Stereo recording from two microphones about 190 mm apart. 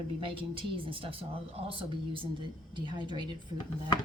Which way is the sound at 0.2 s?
25° right (ahead or behind).